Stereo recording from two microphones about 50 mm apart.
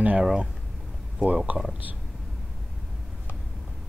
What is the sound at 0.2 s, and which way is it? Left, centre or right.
Speech, centre.